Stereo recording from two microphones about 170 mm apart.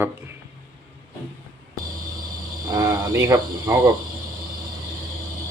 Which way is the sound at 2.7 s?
20° right (ahead or behind).